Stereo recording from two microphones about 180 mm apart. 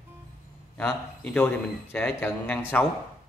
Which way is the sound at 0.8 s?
5° left (ahead or behind).